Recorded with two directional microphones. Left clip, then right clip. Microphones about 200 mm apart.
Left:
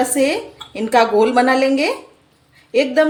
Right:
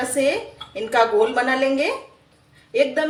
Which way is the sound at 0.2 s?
50° left (ahead or behind).